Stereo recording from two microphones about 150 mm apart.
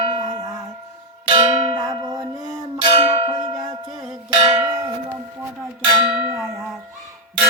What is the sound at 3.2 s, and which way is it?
Music, 25° right (ahead or behind).